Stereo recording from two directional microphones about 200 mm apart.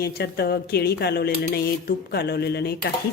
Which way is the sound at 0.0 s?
50° left (ahead or behind).